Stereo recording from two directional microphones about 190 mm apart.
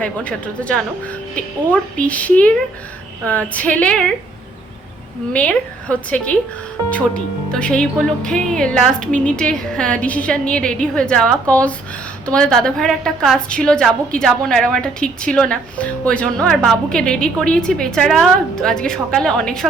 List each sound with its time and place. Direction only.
0.0 s a woman's voice: 5° left (ahead or behind)
5.3 s a woman's voice: 5° left (ahead or behind)